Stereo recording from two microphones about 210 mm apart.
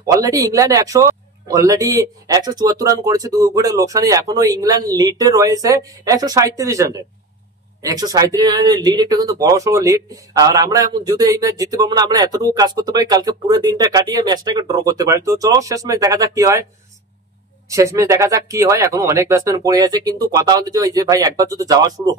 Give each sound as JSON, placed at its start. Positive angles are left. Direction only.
{"t": 0.0, "sound": "speech", "side_deg": -15}
{"t": 17.6, "sound": "speech", "side_deg": -15}